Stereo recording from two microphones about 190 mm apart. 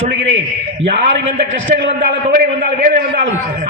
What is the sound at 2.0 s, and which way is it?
A man's voice, 50° right (ahead or behind).